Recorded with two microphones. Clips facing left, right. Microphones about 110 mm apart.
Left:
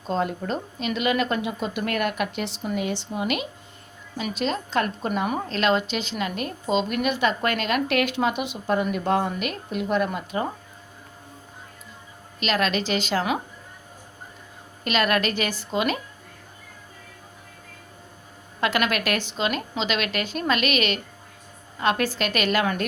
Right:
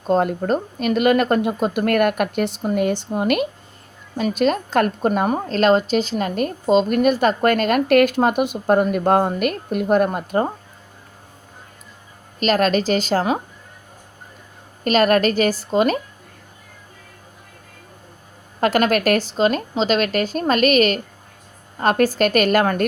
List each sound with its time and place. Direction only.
0.1 s a woman's voice: 50° right (ahead or behind)
12.4 s a woman's voice: 45° right (ahead or behind)
14.8 s a woman's voice: 40° right (ahead or behind)
18.6 s a woman's voice: 45° right (ahead or behind)